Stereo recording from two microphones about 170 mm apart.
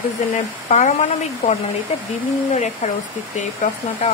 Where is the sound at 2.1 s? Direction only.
45° left (ahead or behind).